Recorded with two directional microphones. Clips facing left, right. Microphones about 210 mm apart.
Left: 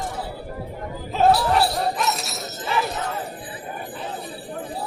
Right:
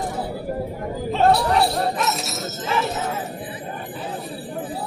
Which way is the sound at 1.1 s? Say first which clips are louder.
Even; centre (ahead or behind).